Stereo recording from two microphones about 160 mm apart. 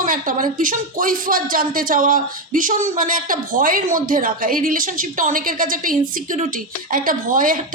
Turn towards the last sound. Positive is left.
turn(degrees=-60)  # may be behind; listen again after turning